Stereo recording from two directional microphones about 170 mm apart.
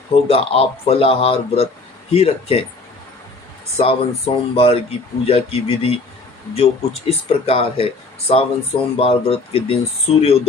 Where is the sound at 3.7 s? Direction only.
35° left (ahead or behind).